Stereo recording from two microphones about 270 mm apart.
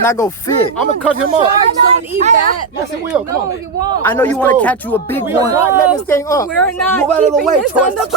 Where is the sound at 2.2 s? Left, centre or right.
Right.